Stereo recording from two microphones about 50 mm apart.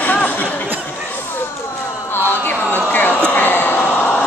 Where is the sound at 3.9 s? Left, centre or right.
Left.